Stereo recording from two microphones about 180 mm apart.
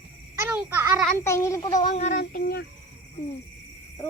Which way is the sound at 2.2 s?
55° left (ahead or behind).